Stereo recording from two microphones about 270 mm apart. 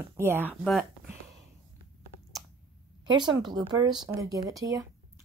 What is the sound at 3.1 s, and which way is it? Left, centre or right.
Speech, centre.